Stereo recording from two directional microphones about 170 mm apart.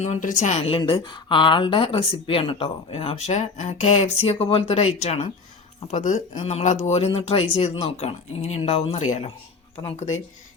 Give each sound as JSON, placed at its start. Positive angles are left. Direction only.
{"t": 0.0, "sound": "a woman's voice", "side_deg": 45}